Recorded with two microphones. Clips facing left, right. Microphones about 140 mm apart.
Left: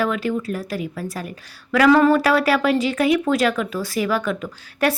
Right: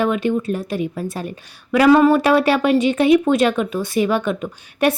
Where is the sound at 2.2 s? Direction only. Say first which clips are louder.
Right 2 dB; 25° right (ahead or behind).